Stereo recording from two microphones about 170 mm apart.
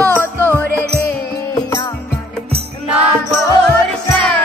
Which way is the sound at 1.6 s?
20° left (ahead or behind).